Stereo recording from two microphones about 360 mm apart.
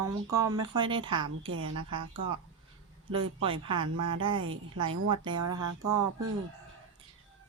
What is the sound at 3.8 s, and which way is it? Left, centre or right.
Speech, right.